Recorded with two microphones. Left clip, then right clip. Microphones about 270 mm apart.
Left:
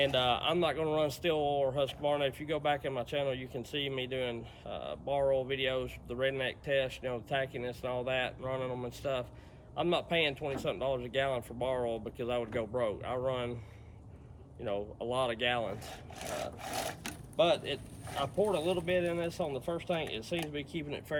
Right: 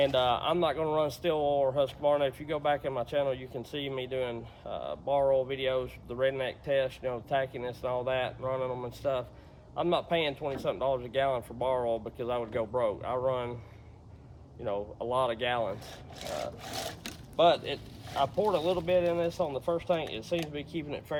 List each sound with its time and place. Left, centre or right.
0.0 s speech: centre
14.6 s speech: centre
16.3 s sewing machine: centre
17.3 s speech: centre